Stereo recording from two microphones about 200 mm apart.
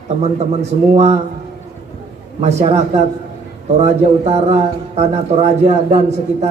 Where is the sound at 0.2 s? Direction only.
35° right (ahead or behind).